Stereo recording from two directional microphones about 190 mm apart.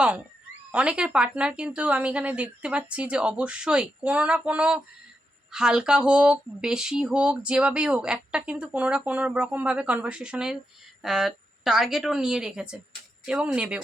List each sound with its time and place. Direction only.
0.7 s speech: 5° right (ahead or behind)